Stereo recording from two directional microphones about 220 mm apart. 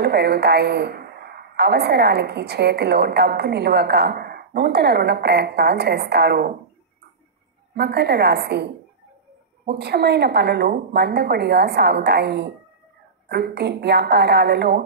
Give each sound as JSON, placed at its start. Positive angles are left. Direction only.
{"t": 0.0, "sound": "a woman's voice", "side_deg": -50}
{"t": 7.7, "sound": "a woman's voice", "side_deg": -50}